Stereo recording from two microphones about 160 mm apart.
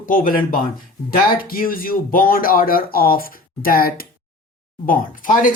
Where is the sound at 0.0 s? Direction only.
60° left (ahead or behind).